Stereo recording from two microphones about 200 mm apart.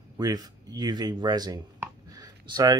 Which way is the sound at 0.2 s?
20° right (ahead or behind).